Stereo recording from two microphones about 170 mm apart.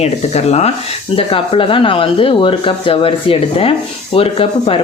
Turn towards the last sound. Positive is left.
turn(degrees=35)  # may be behind; listen again after turning